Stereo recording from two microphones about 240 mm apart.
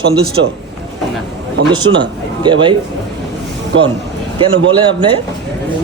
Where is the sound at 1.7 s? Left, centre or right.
Centre.